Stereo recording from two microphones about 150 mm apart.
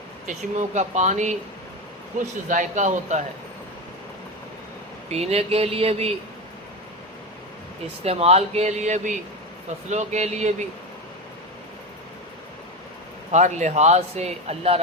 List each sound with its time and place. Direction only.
0.3 s a man's voice: 50° right (ahead or behind)
5.0 s speech: 45° right (ahead or behind)
8.0 s speech: 45° right (ahead or behind)
13.3 s speech: 50° right (ahead or behind)